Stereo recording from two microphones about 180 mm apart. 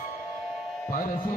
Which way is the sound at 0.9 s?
50° left (ahead or behind).